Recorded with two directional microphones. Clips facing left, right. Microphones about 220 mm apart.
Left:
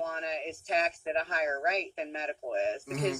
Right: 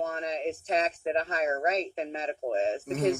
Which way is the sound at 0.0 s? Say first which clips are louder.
Right 4 dB; 45° right (ahead or behind).